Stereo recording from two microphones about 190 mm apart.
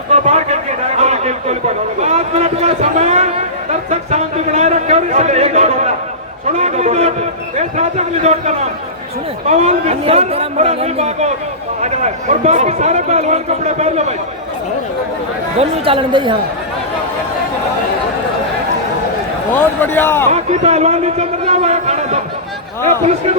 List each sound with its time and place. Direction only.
0.1 s a sound: 35° right (ahead or behind)
6.6 s a man's voice: 35° right (ahead or behind)
15.5 s speech: 30° right (ahead or behind)
19.5 s a man's voice: 10° left (ahead or behind)
20.3 s a man's voice: 35° right (ahead or behind)